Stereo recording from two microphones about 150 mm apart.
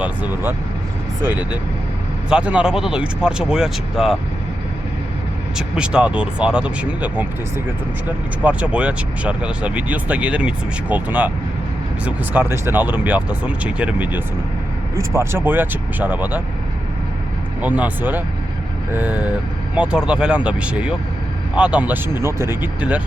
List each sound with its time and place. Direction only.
0.0 s speech: 10° right (ahead or behind)
5.5 s speech: 5° right (ahead or behind)
17.6 s speech: 10° right (ahead or behind)